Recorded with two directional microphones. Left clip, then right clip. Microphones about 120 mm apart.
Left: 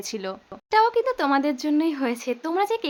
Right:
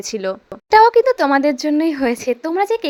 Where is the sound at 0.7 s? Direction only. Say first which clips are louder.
Right 10 dB; 75° right (ahead or behind); by 2.8 s 45° right (ahead or behind).